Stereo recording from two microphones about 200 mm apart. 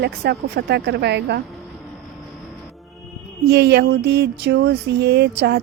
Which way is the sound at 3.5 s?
55° right (ahead or behind).